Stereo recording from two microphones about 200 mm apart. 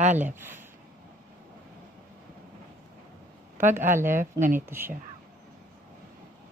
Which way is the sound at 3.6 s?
10° right (ahead or behind).